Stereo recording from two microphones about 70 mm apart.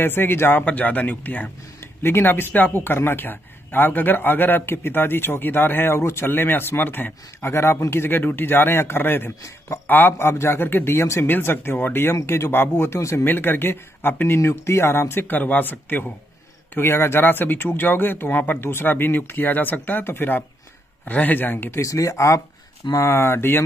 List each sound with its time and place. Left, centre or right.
0.0 s speech: left
21.8 s speech: left